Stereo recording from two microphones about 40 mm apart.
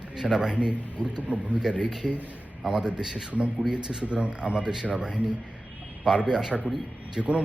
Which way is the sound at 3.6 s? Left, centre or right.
Centre.